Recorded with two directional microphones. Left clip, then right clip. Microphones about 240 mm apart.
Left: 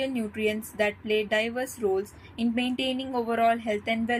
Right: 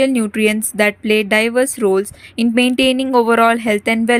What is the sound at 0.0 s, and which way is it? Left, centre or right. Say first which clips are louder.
A woman's voice: right 13 dB; right.